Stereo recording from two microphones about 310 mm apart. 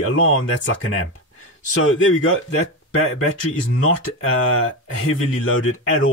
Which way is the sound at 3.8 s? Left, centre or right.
Left.